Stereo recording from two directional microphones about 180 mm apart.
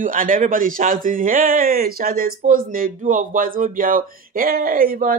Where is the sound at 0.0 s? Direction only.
50° right (ahead or behind).